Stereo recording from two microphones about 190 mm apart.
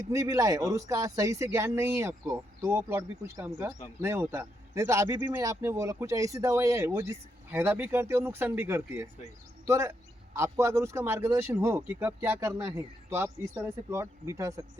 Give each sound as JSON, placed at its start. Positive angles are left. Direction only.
{"t": 0.1, "sound": "a man's voice", "side_deg": -15}